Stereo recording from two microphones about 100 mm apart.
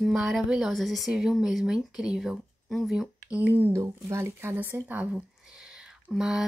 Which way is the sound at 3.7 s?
30° right (ahead or behind).